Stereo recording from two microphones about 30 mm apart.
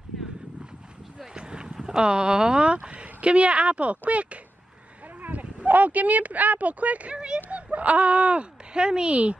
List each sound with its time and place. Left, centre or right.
1.3 s a sound: right
1.8 s speech: right
5.2 s a sound: right
5.7 s speech: right
7.1 s speech: right
7.3 s speech: right